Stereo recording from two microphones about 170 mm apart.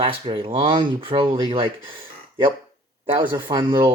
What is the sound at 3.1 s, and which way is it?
Speech, 30° right (ahead or behind).